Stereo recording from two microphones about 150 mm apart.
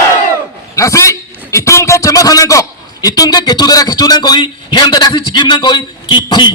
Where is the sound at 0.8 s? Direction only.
20° left (ahead or behind).